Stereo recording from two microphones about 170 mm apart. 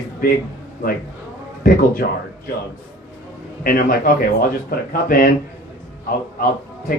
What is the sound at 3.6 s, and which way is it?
A man's voice, 55° left (ahead or behind).